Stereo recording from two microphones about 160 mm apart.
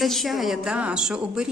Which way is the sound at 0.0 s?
Centre (ahead or behind).